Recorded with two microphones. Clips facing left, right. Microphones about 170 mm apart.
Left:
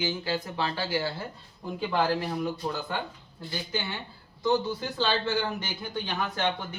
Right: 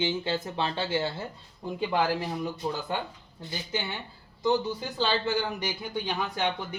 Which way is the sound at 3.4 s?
20° right (ahead or behind).